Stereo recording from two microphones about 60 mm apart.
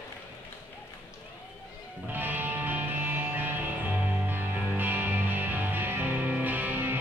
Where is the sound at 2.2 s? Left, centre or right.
Right.